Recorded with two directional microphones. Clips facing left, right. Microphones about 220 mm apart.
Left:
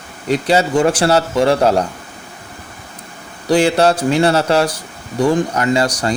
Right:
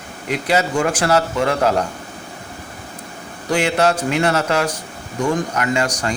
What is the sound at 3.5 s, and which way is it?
Speech, 30° left (ahead or behind).